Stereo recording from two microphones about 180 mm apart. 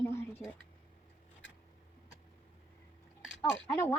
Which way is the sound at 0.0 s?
10° left (ahead or behind).